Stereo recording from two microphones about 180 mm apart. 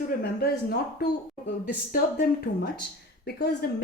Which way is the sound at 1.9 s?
55° left (ahead or behind).